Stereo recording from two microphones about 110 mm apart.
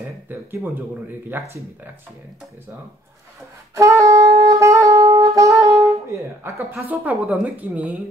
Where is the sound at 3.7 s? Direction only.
30° right (ahead or behind).